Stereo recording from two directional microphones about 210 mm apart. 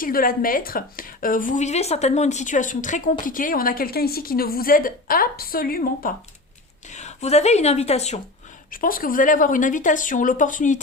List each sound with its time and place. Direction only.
0.0 s a woman's voice: 40° left (ahead or behind)
8.7 s a woman's voice: 40° left (ahead or behind)